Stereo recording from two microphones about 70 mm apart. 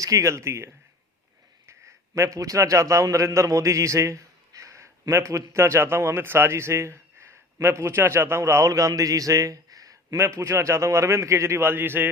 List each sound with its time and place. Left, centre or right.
0.0 s a man's voice: right
2.1 s a man's voice: right
10.2 s a man's voice: right